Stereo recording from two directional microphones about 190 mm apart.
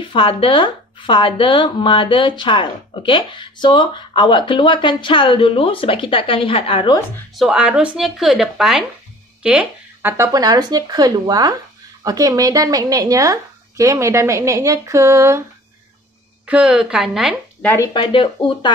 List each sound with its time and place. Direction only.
0.0 s speech: 25° left (ahead or behind)
7.3 s speech: 5° right (ahead or behind)
16.4 s speech: 5° right (ahead or behind)
17.9 s speech: 25° left (ahead or behind)